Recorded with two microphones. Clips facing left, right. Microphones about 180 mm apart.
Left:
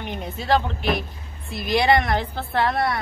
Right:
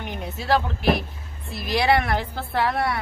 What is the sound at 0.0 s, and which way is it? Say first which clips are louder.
A woman's voice: left 1 dB; 5° right (ahead or behind).